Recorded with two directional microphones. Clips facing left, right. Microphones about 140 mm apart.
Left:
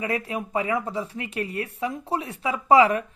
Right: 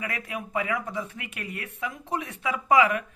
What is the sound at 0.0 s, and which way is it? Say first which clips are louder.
Speech: left 6 dB; 30° left (ahead or behind).